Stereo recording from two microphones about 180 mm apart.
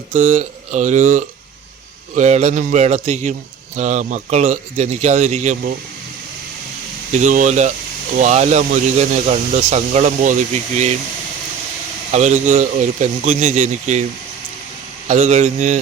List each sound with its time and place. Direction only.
0.1 s speech: 40° right (ahead or behind)
7.1 s speech: 40° right (ahead or behind)
12.1 s speech: 40° right (ahead or behind)
15.0 s speech: 40° right (ahead or behind)